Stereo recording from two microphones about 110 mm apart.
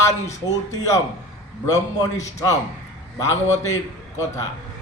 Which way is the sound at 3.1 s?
30° left (ahead or behind).